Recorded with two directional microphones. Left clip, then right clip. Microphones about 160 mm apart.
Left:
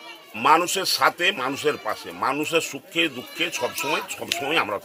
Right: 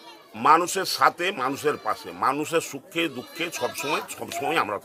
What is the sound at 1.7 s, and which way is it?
Speech, centre (ahead or behind).